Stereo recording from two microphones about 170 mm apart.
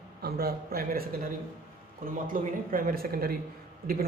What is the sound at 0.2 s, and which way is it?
A man's voice, 65° right (ahead or behind).